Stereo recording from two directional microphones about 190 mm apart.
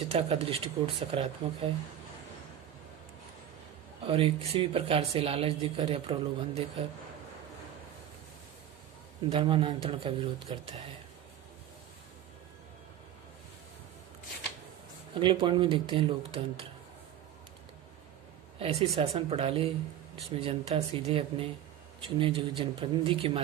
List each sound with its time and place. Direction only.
0.1 s speech: 30° right (ahead or behind)
4.1 s speech: 30° right (ahead or behind)
9.3 s speech: 25° right (ahead or behind)
15.1 s speech: 25° right (ahead or behind)
18.6 s speech: 30° right (ahead or behind)